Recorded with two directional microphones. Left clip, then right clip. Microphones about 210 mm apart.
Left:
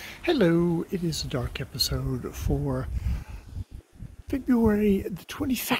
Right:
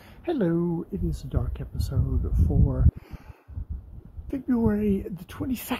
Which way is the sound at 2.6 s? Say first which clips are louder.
Left 1 dB; 15° left (ahead or behind).